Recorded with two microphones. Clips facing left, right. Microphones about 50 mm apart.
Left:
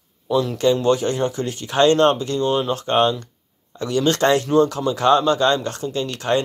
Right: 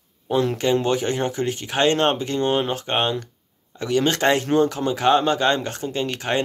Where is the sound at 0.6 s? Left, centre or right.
Right.